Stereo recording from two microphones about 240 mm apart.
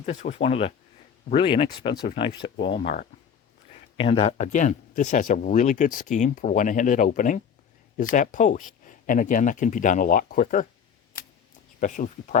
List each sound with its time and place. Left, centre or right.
0.0 s speech: left
11.8 s speech: left